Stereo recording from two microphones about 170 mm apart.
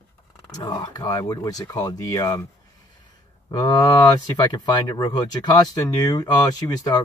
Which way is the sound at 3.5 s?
25° left (ahead or behind).